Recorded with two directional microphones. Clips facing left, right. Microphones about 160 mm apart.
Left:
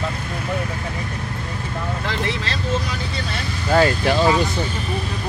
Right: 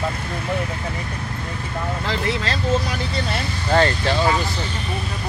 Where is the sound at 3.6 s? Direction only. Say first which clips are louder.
Left 2 dB; 10° left (ahead or behind).